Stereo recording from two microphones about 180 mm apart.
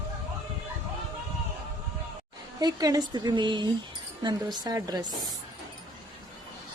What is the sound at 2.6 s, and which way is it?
Speech, 20° right (ahead or behind).